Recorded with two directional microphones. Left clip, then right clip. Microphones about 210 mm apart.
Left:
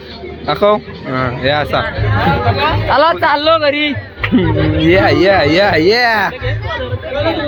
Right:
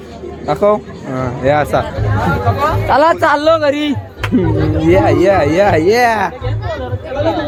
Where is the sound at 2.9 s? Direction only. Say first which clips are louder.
Right 1 dB; 40° right (ahead or behind).